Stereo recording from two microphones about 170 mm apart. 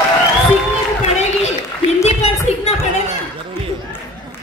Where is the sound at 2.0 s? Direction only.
40° left (ahead or behind).